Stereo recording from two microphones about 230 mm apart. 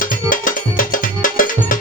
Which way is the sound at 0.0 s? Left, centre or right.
Left.